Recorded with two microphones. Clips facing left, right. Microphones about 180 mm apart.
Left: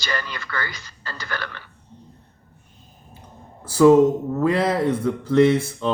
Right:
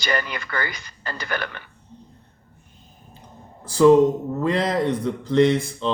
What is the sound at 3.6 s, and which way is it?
Speech, 5° left (ahead or behind).